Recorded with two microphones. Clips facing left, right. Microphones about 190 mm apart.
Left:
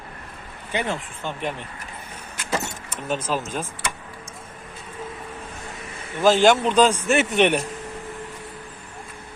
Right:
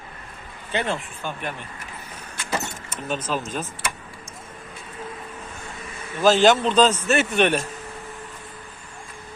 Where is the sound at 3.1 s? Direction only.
10° left (ahead or behind).